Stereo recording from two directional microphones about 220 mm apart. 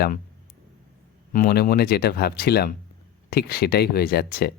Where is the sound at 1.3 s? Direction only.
40° left (ahead or behind).